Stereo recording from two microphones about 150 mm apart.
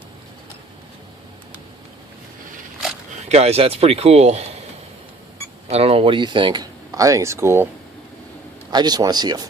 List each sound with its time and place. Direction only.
3.2 s speech: 45° right (ahead or behind)
5.6 s speech: 40° right (ahead or behind); by 7.7 s 15° right (ahead or behind)
8.7 s speech: 25° right (ahead or behind)